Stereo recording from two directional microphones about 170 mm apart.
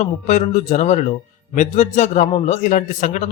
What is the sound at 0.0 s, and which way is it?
Speech, 45° left (ahead or behind).